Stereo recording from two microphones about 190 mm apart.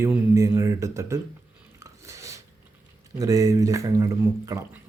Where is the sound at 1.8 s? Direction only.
15° right (ahead or behind).